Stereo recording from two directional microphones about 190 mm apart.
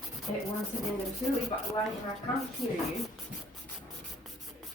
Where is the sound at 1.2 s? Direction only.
Centre (ahead or behind).